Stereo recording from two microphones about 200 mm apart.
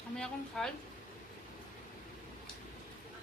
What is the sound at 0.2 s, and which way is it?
Speech, 5° left (ahead or behind).